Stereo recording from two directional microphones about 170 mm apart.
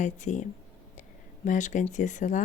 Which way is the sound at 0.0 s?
45° left (ahead or behind).